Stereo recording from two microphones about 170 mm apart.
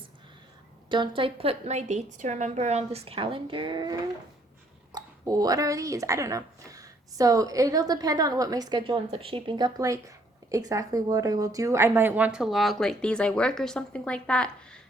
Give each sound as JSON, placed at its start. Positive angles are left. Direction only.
{"t": 0.9, "sound": "a woman's voice", "side_deg": -25}